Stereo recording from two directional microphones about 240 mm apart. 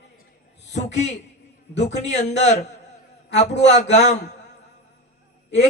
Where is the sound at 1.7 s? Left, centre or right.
Left.